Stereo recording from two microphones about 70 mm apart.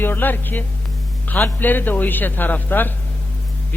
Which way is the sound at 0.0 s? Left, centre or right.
Left.